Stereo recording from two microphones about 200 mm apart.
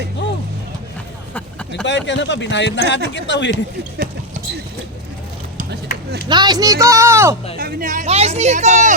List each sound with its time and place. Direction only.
1.3 s a sound: 10° left (ahead or behind)
1.8 s speech: 65° left (ahead or behind)
6.2 s speech: 20° right (ahead or behind)
7.6 s speech: 40° right (ahead or behind)